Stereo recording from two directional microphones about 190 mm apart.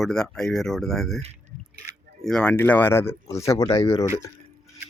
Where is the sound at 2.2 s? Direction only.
Centre (ahead or behind).